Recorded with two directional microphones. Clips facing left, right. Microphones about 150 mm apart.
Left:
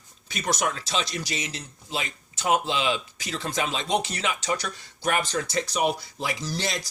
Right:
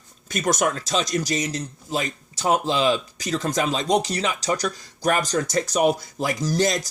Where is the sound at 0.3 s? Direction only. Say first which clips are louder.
Right 5 dB; 45° right (ahead or behind).